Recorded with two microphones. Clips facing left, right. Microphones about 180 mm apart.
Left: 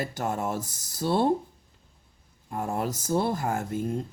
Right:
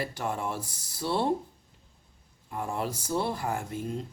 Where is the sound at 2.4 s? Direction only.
45° left (ahead or behind).